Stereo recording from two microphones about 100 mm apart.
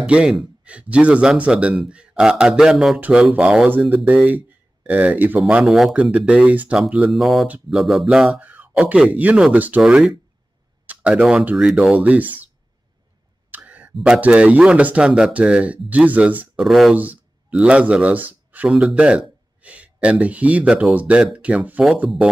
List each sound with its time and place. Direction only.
0.0 s speech: 10° right (ahead or behind)
5.5 s speech: 5° right (ahead or behind)
7.1 s speech: centre (ahead or behind)
11.9 s speech: 15° right (ahead or behind)
13.5 s a sound: 15° right (ahead or behind)
14.0 s speech: 10° right (ahead or behind)
16.5 s speech: centre (ahead or behind)
16.9 s speech: 15° right (ahead or behind)
18.7 s speech: 5° right (ahead or behind)